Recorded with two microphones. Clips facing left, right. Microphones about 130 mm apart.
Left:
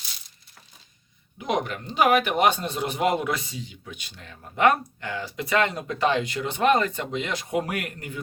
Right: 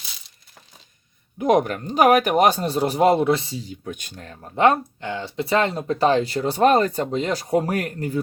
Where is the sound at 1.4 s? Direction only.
45° right (ahead or behind).